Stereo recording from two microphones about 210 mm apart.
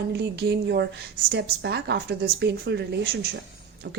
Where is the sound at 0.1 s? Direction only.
55° right (ahead or behind).